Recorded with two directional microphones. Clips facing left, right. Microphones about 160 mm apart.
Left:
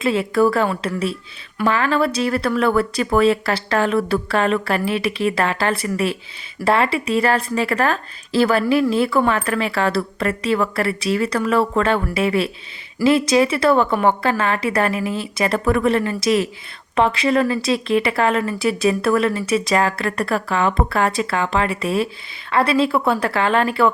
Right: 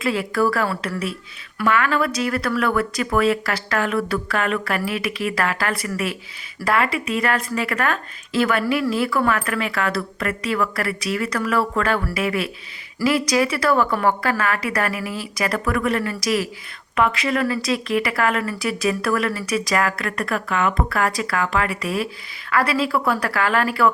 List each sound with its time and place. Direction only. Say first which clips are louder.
0.0 s a woman's voice: left 4 dB; 25° left (ahead or behind)